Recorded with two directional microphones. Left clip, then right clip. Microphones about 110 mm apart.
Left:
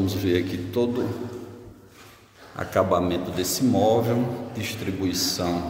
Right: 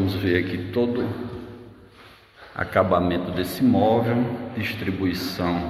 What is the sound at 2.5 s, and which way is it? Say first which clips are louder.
Speech: right 2 dB; 10° left (ahead or behind).